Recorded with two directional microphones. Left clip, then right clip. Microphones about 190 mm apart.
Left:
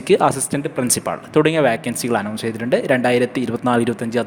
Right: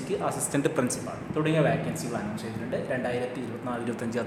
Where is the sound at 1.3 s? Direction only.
55° left (ahead or behind).